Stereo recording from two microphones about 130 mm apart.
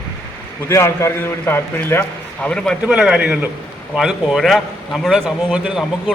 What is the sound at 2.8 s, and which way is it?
A man's voice, 10° right (ahead or behind).